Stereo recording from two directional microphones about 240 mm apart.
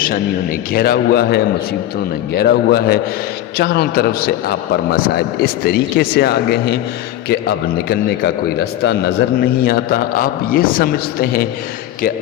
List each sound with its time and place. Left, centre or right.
0.7 s a man's voice: left